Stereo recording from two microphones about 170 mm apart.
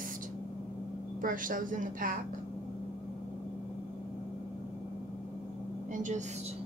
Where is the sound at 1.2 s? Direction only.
55° right (ahead or behind).